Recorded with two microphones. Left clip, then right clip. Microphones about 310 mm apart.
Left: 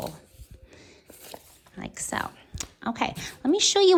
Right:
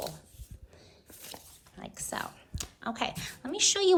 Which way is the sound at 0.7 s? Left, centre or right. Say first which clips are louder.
Left 6 dB; left.